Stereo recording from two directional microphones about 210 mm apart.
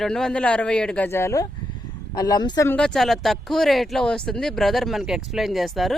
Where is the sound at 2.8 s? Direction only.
Centre (ahead or behind).